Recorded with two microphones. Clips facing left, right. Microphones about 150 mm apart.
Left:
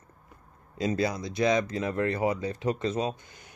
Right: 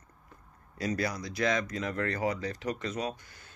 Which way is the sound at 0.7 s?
25° left (ahead or behind).